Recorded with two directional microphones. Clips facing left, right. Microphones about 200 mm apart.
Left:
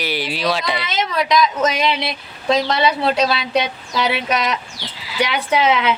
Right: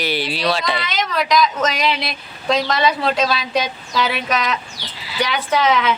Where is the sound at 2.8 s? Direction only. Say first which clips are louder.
Left 1 dB; 25° left (ahead or behind).